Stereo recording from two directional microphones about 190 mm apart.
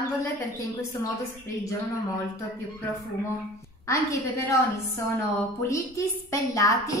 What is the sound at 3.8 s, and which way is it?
A woman's voice, 15° left (ahead or behind).